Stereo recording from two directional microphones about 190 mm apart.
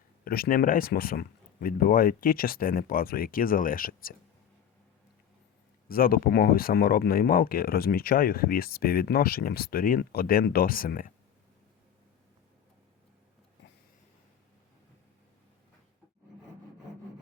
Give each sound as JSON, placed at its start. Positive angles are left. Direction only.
{"t": 0.3, "sound": "speech", "side_deg": 50}
{"t": 5.9, "sound": "speech", "side_deg": 50}